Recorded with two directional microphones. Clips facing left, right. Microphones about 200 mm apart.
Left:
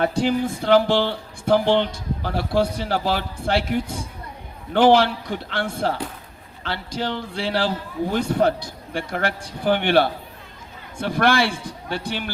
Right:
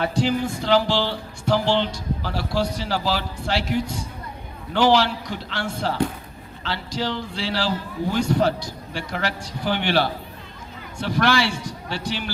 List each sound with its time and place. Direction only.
0.0 s speech: 50° left (ahead or behind)